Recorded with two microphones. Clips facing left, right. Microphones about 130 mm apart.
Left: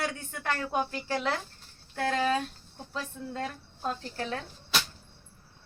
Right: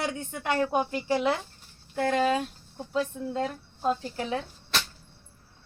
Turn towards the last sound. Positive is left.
turn(degrees=0)  # may be behind; listen again after turning